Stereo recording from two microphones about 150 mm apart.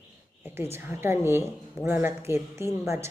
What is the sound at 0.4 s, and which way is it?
A woman's voice, 15° right (ahead or behind).